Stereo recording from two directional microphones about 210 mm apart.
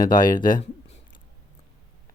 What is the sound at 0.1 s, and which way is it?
Speech, 20° left (ahead or behind).